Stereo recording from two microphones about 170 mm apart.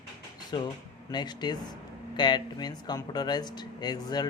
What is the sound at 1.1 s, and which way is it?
Speech, 25° left (ahead or behind).